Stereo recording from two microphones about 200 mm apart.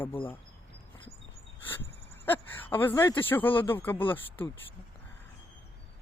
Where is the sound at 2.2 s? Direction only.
10° left (ahead or behind).